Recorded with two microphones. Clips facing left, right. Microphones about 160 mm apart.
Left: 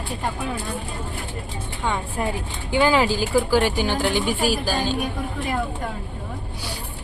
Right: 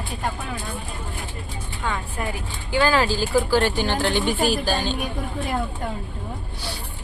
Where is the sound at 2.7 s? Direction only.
15° left (ahead or behind).